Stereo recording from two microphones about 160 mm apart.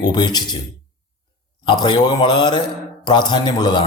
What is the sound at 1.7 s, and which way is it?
Speech, 30° left (ahead or behind).